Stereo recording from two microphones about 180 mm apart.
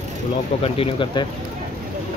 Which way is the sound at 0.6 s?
30° left (ahead or behind).